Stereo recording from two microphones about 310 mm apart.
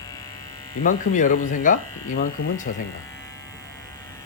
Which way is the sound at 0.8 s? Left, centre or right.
Left.